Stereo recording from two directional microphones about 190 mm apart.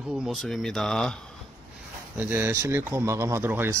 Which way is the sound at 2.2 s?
10° right (ahead or behind).